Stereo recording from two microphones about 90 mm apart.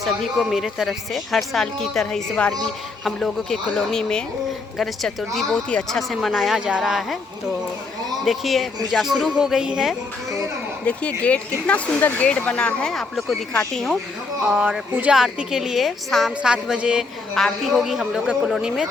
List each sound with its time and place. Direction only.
0.0 s speech: centre (ahead or behind)
8.2 s speech: centre (ahead or behind)
10.8 s speech: 15° left (ahead or behind)
14.5 s speech: 10° right (ahead or behind)
16.4 s speech: 10° right (ahead or behind)
17.3 s speech: 5° left (ahead or behind)